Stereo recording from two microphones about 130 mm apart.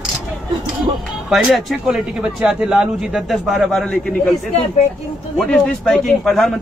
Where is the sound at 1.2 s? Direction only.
Centre (ahead or behind).